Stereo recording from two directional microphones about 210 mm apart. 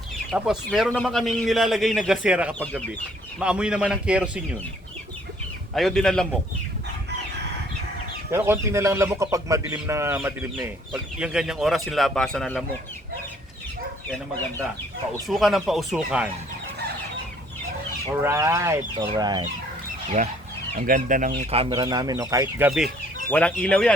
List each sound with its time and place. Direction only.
0.3 s a man's voice: centre (ahead or behind)
5.7 s a man's voice: centre (ahead or behind)
8.3 s speech: 10° right (ahead or behind)
15.3 s a man's voice: centre (ahead or behind)
18.2 s speech: 15° right (ahead or behind)
20.7 s speech: 40° right (ahead or behind); by 22.9 s 5° right (ahead or behind)
23.3 s a man's voice: 5° left (ahead or behind)